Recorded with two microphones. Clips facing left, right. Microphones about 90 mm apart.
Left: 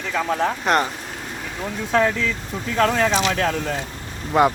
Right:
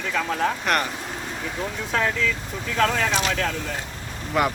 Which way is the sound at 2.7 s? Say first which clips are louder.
Left 3 dB; 25° left (ahead or behind).